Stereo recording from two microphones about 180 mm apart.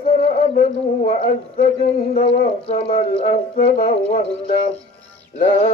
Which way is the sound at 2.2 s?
35° left (ahead or behind).